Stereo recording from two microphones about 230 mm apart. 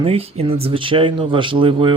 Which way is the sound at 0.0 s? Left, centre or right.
Right.